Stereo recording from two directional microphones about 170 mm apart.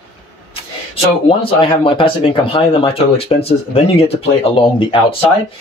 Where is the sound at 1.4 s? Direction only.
30° left (ahead or behind).